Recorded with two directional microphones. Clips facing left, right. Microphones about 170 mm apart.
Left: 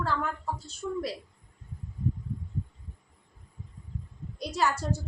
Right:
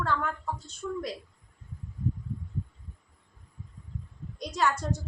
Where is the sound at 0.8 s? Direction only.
15° left (ahead or behind).